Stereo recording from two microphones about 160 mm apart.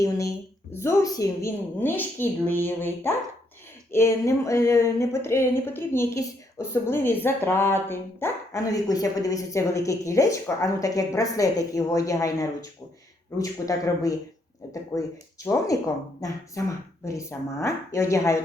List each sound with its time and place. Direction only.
0.0 s a woman's voice: 20° left (ahead or behind)
15.4 s speech: 20° left (ahead or behind)